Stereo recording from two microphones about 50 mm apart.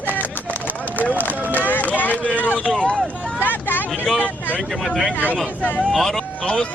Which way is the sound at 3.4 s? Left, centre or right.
Left.